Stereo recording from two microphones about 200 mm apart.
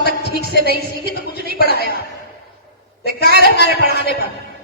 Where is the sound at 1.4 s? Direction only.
50° left (ahead or behind).